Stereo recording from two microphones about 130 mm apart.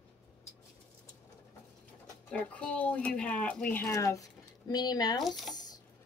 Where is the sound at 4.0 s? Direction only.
25° left (ahead or behind).